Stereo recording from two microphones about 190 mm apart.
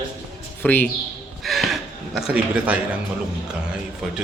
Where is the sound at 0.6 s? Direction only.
10° left (ahead or behind); by 2.8 s 5° right (ahead or behind).